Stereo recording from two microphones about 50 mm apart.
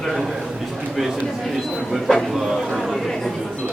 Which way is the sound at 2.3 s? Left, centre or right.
Centre.